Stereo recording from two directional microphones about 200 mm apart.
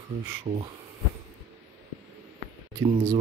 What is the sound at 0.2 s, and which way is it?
Speech, 20° right (ahead or behind).